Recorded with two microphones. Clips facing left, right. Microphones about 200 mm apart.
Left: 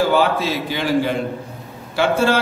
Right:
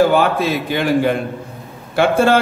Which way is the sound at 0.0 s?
55° right (ahead or behind).